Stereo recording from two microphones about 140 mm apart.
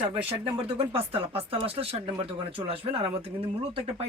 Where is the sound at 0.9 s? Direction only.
40° right (ahead or behind).